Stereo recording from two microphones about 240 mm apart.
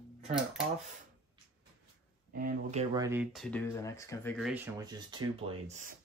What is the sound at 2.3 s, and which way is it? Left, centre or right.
Speech, right.